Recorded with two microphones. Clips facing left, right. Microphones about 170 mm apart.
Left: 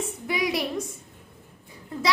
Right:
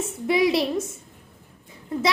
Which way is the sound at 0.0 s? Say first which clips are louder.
Right 7 dB; 25° right (ahead or behind).